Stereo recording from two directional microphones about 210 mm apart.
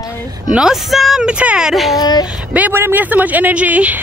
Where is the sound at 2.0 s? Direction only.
20° left (ahead or behind).